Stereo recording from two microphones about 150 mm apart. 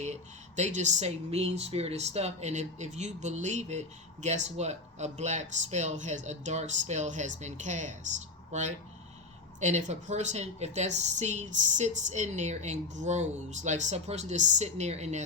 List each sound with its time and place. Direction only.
0.0 s speech: 50° right (ahead or behind)